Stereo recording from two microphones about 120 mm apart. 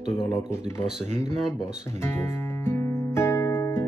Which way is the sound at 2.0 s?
20° left (ahead or behind).